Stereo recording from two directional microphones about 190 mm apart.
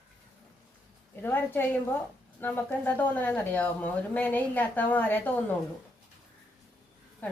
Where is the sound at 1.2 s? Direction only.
10° left (ahead or behind).